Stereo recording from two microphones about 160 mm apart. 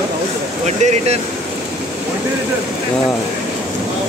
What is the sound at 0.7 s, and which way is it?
Speech, 45° right (ahead or behind).